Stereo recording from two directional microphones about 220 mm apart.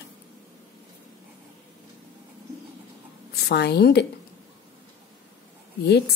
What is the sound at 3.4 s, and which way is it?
Speech, 45° left (ahead or behind).